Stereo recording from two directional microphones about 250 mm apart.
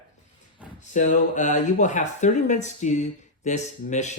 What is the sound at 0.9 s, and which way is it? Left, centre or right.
Speech, left.